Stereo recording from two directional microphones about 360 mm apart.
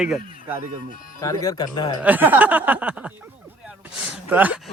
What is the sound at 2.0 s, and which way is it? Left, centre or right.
A man's voice, centre.